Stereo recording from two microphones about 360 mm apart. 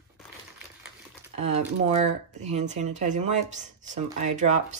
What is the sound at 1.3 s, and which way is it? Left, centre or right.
Speech, centre.